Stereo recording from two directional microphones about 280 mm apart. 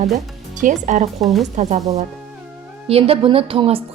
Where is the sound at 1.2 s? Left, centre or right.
Centre.